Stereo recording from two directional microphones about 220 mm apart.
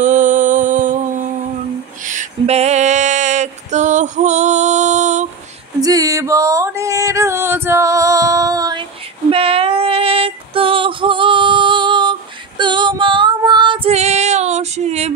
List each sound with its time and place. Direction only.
0.0 s music: 35° right (ahead or behind)
2.0 s female singing: 30° right (ahead or behind)
5.8 s music: 15° right (ahead or behind)
9.3 s female singing: 25° right (ahead or behind)